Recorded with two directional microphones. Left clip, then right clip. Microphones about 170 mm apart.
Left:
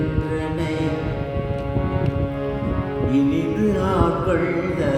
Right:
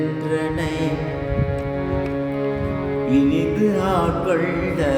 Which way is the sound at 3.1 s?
30° right (ahead or behind).